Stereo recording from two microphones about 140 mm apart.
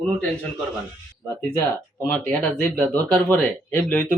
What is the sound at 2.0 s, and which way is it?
Speech, 10° left (ahead or behind).